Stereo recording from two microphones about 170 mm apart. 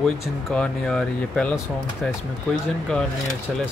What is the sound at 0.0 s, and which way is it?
Speech, 5° left (ahead or behind).